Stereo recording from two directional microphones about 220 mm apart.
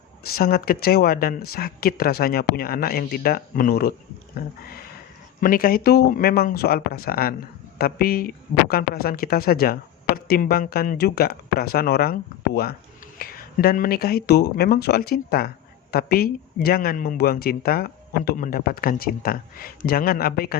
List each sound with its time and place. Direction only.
0.3 s speech: 45° left (ahead or behind)